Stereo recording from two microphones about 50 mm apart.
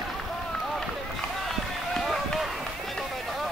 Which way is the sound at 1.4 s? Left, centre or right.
Centre.